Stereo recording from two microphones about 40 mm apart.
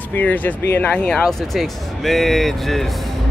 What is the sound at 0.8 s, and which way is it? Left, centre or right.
Speech, left.